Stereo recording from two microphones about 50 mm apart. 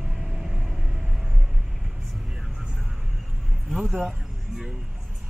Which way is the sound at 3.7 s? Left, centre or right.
Centre.